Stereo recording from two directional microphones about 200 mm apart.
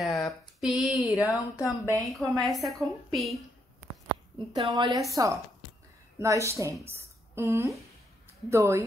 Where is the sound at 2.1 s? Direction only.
Centre (ahead or behind).